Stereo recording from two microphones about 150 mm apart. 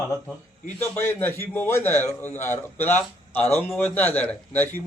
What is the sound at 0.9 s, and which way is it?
A man's voice, 15° left (ahead or behind).